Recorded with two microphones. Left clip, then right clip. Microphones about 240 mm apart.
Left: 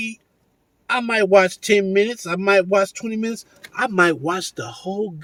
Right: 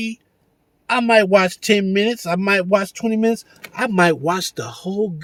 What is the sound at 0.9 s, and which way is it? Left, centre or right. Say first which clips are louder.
Speech: right 4 dB; right.